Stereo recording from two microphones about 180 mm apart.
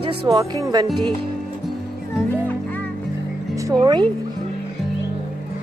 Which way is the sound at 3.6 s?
20° right (ahead or behind).